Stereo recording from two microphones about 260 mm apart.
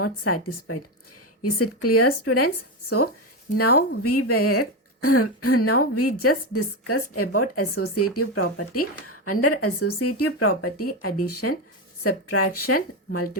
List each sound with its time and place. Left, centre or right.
0.0 s speech: left
3.6 s speech: left